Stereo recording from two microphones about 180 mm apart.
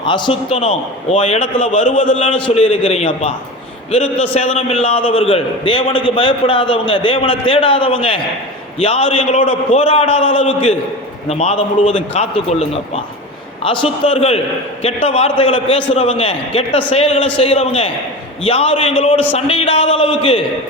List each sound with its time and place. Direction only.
0.0 s a man's voice: 25° left (ahead or behind)
1.8 s a man's voice: 45° left (ahead or behind)
9.4 s a man's voice: 45° left (ahead or behind)
9.8 s a man's voice: 30° left (ahead or behind)